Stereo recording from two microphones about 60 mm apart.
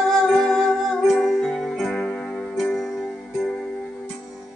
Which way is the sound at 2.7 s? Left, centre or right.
Centre.